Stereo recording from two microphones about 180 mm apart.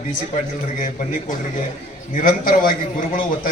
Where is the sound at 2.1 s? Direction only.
50° left (ahead or behind).